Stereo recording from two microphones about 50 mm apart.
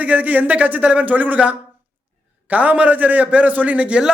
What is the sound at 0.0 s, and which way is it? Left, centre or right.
A man's voice, right.